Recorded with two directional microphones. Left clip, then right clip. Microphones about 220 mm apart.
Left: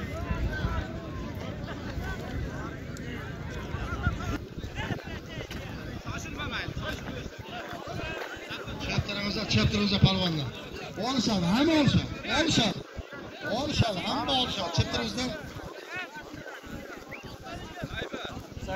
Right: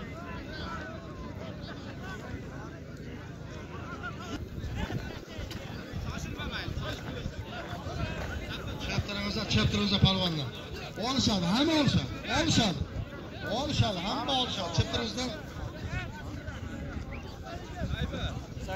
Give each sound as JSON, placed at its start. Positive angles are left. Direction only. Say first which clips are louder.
{"t": 6.1, "sound": "vehicle", "louder": "left 4 dB", "side_deg": -35}
{"t": 8.8, "sound": "music", "louder": "left 3 dB", "side_deg": -30}
{"t": 11.0, "sound": "a man's voice", "louder": "left 1 dB", "side_deg": -25}